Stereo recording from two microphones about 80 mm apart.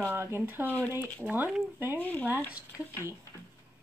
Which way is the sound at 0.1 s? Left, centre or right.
Right.